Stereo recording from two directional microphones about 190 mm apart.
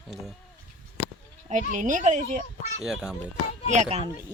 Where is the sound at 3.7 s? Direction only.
35° right (ahead or behind).